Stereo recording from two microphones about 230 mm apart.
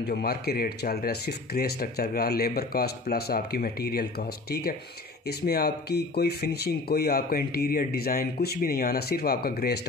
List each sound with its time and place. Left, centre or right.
0.1 s speech: left